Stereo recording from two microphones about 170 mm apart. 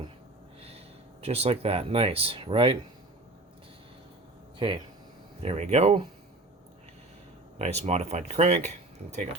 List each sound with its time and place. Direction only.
1.2 s speech: 35° right (ahead or behind)
4.5 s speech: 30° right (ahead or behind)
5.4 s speech: 40° right (ahead or behind)
7.6 s speech: 40° right (ahead or behind)